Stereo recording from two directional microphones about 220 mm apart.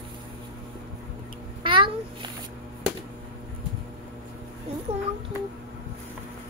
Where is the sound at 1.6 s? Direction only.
20° right (ahead or behind).